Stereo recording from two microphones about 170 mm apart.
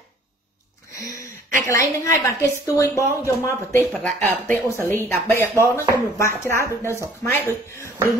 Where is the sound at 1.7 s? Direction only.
15° left (ahead or behind).